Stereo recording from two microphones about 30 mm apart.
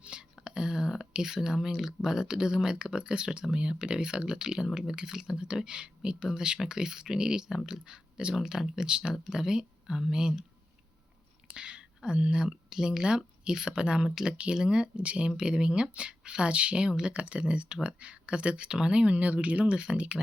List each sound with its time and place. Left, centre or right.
0.0 s whispering: right
0.4 s speech: right
5.6 s speech: right
11.5 s whispering: right
12.3 s speech: right
13.0 s speech: right
14.5 s speech: right
15.0 s speech: right
15.3 s speech: right
19.1 s speech: right
19.7 s speech: right